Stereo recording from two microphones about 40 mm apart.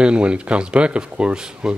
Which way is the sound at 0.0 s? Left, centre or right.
Right.